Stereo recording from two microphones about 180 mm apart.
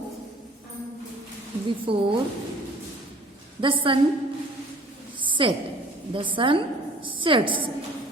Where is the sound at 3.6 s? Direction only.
30° right (ahead or behind).